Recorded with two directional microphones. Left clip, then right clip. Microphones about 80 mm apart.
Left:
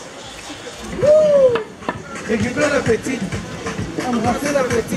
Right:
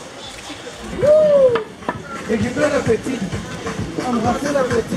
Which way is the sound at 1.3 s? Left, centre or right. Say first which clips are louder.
Even; centre.